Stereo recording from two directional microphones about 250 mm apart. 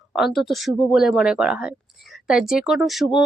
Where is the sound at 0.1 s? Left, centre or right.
Centre.